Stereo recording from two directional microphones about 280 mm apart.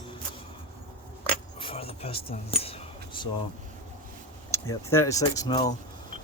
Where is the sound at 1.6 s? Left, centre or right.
Centre.